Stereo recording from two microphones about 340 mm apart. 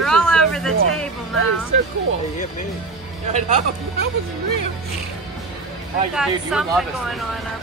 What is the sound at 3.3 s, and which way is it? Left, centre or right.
Speech, right.